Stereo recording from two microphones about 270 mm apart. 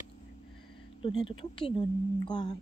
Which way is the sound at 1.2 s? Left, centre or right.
Centre.